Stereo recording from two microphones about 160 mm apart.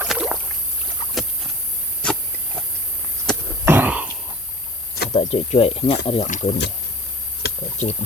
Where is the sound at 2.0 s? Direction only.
5° left (ahead or behind).